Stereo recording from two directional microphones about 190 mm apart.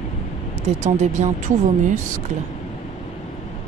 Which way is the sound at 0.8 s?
35° right (ahead or behind).